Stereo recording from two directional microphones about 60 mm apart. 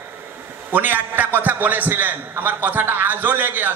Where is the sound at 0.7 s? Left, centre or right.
Right.